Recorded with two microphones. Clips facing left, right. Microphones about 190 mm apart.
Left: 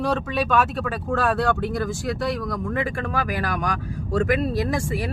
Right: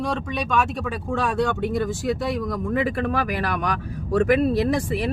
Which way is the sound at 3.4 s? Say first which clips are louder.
Right 1 dB; 45° left (ahead or behind).